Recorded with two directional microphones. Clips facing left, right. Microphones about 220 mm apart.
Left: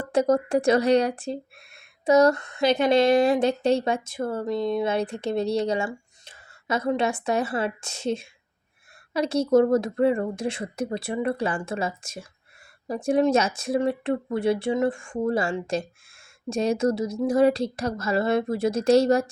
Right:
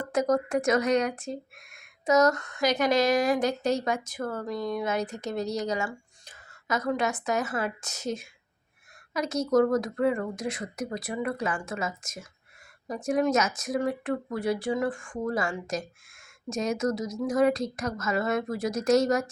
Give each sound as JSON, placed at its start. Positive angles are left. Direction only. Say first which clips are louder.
{"t": 0.0, "sound": "speech", "louder": "left 4 dB", "side_deg": 30}